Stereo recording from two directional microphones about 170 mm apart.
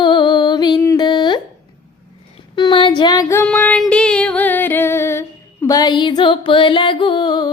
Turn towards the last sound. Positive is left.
turn(degrees=25)  # may be behind; listen again after turning